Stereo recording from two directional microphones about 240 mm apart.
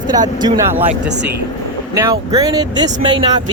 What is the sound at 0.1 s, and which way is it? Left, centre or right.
Speech, centre.